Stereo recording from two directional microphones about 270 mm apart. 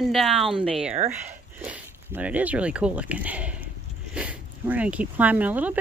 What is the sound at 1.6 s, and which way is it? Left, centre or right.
Speech, centre.